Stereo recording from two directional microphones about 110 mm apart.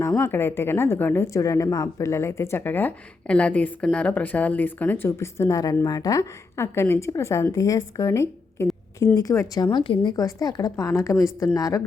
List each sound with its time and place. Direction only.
0.0 s a woman's voice: 25° left (ahead or behind)
9.7 s a woman's voice: 45° left (ahead or behind); by 11.8 s 30° left (ahead or behind)